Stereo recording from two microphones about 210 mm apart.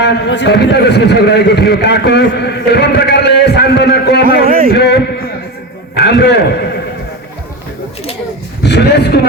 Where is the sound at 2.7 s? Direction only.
50° left (ahead or behind).